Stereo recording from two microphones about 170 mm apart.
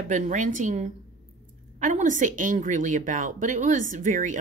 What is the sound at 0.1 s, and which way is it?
A woman's voice, 50° right (ahead or behind).